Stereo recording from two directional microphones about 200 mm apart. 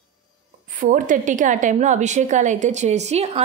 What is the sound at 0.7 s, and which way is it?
A woman's voice, 40° right (ahead or behind).